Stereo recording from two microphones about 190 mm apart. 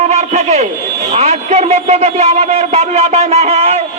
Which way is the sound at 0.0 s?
35° right (ahead or behind).